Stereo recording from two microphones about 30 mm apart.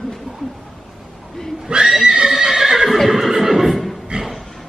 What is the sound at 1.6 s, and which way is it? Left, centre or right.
Speech, right.